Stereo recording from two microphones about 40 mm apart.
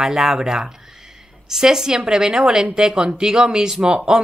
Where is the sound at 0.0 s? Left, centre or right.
Centre.